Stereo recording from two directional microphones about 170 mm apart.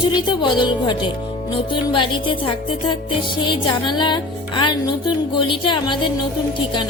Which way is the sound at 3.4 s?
30° left (ahead or behind).